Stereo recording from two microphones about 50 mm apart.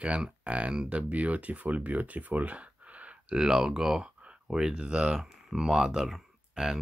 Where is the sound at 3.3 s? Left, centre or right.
Centre.